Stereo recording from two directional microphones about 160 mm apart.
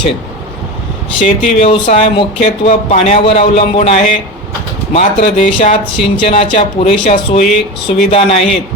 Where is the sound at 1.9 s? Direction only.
40° left (ahead or behind).